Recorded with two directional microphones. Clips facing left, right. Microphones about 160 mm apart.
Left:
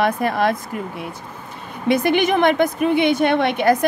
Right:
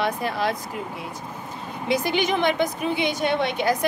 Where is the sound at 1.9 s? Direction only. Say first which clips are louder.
Left 6 dB; 55° left (ahead or behind).